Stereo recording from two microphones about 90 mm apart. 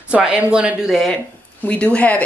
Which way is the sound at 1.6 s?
15° left (ahead or behind).